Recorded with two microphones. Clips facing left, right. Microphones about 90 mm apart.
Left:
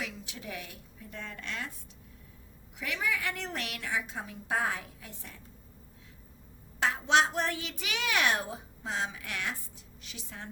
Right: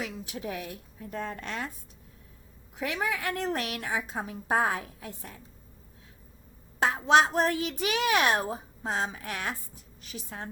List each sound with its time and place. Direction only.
0.0 s a woman's voice: 40° right (ahead or behind)
2.7 s a woman's voice: 40° right (ahead or behind)
6.7 s a woman's voice: 40° right (ahead or behind)